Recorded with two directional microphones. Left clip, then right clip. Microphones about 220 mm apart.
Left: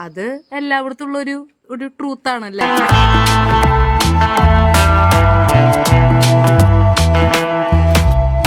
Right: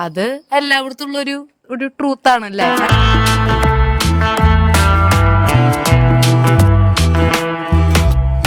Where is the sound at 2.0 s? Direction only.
35° right (ahead or behind).